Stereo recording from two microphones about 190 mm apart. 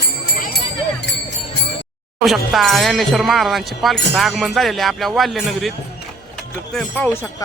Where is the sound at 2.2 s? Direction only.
Centre (ahead or behind).